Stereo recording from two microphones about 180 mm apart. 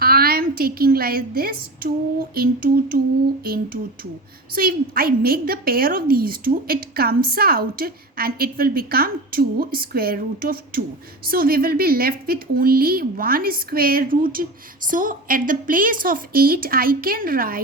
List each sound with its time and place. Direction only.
0.0 s a woman's voice: 55° right (ahead or behind)